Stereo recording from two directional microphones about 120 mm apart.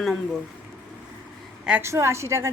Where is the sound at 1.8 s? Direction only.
25° right (ahead or behind).